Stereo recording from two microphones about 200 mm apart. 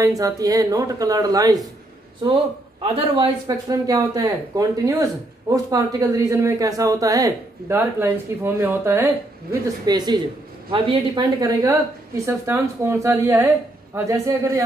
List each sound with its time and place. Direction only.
0.0 s speech: 15° right (ahead or behind)
2.8 s speech: 25° right (ahead or behind)